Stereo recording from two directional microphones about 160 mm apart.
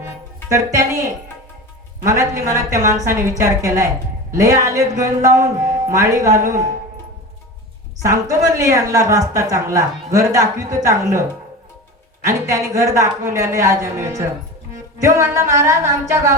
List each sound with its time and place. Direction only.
0.5 s speech: 20° right (ahead or behind)
8.0 s speech: 20° right (ahead or behind)
12.2 s speech: 20° right (ahead or behind)